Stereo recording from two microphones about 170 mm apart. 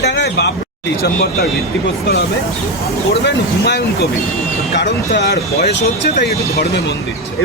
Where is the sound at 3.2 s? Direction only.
75° left (ahead or behind).